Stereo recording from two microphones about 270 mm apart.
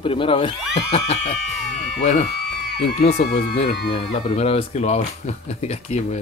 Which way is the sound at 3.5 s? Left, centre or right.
Left.